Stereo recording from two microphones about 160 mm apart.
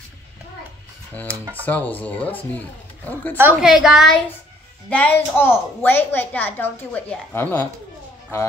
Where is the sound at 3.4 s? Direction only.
10° right (ahead or behind).